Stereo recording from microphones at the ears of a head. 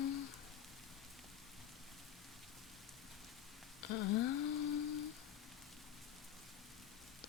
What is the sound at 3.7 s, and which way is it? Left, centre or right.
Humming, left.